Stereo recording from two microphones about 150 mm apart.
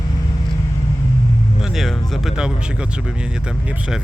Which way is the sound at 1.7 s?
Centre (ahead or behind).